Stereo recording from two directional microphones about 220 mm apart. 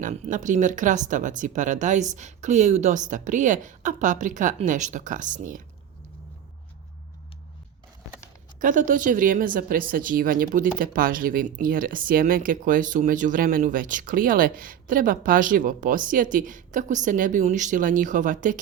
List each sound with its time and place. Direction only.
0.0 s speech: 35° right (ahead or behind)
8.5 s speech: 35° right (ahead or behind)